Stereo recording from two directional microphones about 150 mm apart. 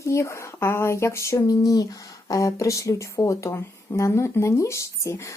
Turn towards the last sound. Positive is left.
turn(degrees=20)  # may be behind; listen again after turning